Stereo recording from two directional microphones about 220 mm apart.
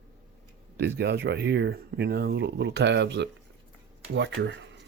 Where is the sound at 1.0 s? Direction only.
50° right (ahead or behind).